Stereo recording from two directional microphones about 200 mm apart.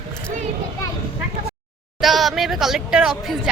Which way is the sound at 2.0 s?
Centre (ahead or behind).